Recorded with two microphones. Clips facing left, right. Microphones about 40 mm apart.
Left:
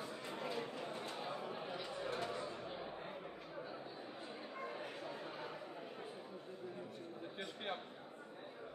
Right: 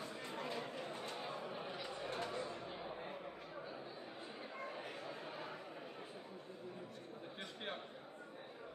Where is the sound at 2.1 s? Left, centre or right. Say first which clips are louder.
Even; centre.